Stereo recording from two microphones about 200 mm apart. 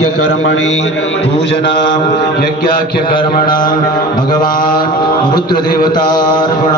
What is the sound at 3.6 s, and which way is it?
Mantra, 20° left (ahead or behind).